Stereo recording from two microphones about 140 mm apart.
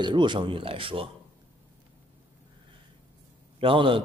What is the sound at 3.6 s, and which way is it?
Speech, 40° right (ahead or behind).